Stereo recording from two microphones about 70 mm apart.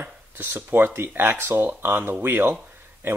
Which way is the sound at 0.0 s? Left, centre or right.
Right.